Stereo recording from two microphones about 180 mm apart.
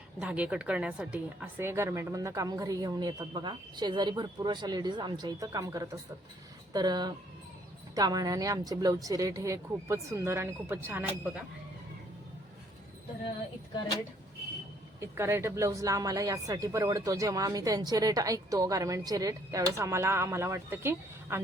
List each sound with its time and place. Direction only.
0.2 s speech: 5° right (ahead or behind)
15.0 s speech: 15° right (ahead or behind)